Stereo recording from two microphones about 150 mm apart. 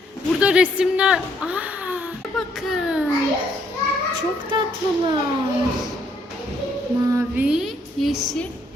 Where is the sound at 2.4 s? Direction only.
Centre (ahead or behind).